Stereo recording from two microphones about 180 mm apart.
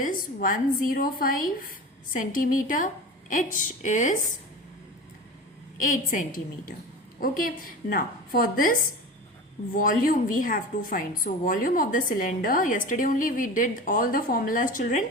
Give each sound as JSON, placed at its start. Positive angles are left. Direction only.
{"t": 0.0, "sound": "a woman's voice", "side_deg": 50}
{"t": 5.8, "sound": "a woman's voice", "side_deg": 45}
{"t": 9.7, "sound": "a woman's voice", "side_deg": 50}